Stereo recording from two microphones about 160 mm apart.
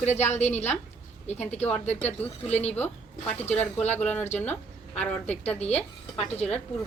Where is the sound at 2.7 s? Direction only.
10° left (ahead or behind).